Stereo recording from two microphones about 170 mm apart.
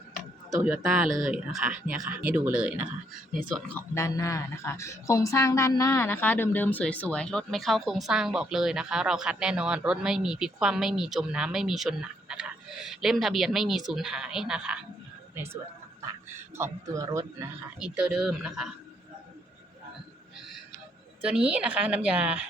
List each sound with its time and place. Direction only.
0.6 s a woman's voice: 5° right (ahead or behind)
3.8 s a woman's voice: 15° left (ahead or behind); by 15.5 s 15° right (ahead or behind)
16.6 s speech: 15° right (ahead or behind)
17.7 s a woman's voice: 5° right (ahead or behind)
21.2 s speech: 5° right (ahead or behind)